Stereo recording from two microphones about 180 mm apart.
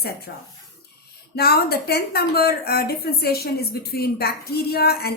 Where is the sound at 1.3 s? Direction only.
60° left (ahead or behind).